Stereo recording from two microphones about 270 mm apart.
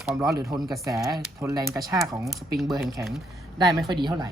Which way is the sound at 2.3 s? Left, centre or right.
Centre.